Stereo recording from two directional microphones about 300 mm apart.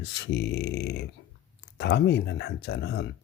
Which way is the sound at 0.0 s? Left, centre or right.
Left.